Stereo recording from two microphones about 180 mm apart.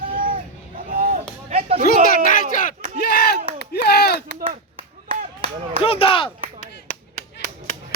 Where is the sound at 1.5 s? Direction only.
35° right (ahead or behind).